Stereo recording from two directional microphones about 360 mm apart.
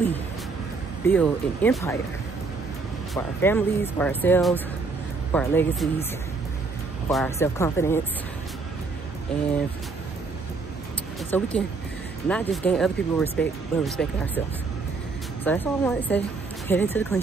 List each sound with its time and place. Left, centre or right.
1.0 s speech: centre
3.2 s speech: centre
7.1 s speech: centre
11.2 s speech: centre
15.4 s speech: centre